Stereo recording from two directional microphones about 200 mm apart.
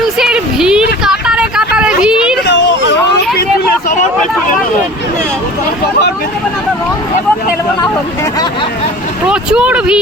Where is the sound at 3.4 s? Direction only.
50° left (ahead or behind).